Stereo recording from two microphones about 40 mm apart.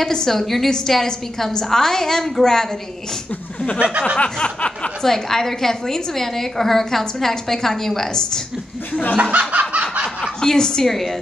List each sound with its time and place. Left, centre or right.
0.0 s a woman's voice: centre
4.2 s a sound: left
5.0 s a woman's voice: centre
9.1 s snicker: right
10.4 s a woman's voice: centre